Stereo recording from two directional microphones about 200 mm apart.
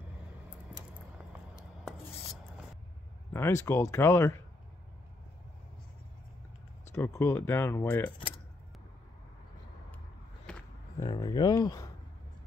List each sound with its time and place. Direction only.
1.5 s writing: 5° right (ahead or behind)
3.3 s speech: 10° left (ahead or behind)
6.9 s speech: 10° left (ahead or behind)
11.0 s a sound: 20° left (ahead or behind)